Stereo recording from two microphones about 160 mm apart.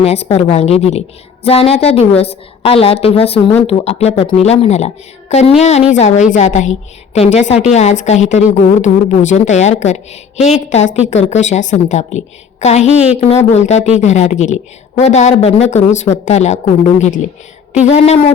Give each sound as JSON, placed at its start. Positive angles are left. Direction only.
{"t": 0.0, "sound": "a woman's voice", "side_deg": 40}